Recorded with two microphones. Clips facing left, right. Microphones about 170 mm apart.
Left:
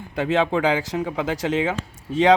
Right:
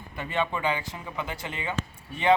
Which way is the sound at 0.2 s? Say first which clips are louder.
Left 9 dB; 90° left.